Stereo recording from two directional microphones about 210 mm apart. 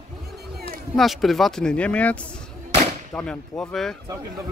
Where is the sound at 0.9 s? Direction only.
Centre (ahead or behind).